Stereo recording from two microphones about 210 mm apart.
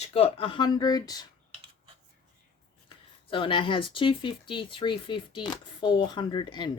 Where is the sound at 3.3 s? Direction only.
25° left (ahead or behind).